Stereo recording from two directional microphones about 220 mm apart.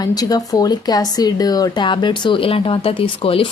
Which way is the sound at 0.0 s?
15° left (ahead or behind).